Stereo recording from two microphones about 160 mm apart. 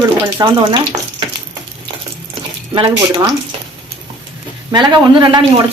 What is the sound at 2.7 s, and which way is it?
Speech, 35° right (ahead or behind).